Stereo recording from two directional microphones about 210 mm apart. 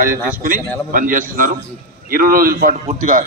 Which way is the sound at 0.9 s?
40° right (ahead or behind).